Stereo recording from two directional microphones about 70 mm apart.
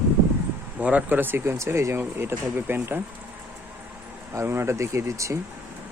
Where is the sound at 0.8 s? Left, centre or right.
Centre.